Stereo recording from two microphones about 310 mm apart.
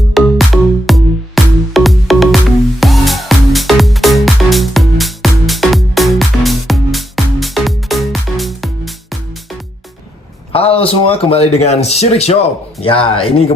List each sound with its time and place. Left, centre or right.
0.1 s music: centre
10.5 s speech: centre